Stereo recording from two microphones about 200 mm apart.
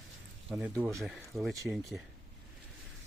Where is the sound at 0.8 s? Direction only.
Centre (ahead or behind).